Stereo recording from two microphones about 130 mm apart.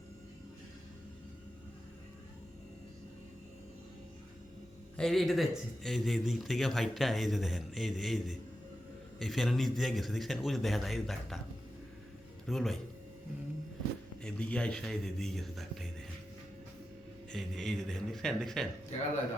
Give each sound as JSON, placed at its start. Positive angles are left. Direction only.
{"t": 4.9, "sound": "a man's voice", "side_deg": 0}
{"t": 12.5, "sound": "a man's voice", "side_deg": 0}
{"t": 14.3, "sound": "a man's voice", "side_deg": 5}
{"t": 17.3, "sound": "a man's voice", "side_deg": 0}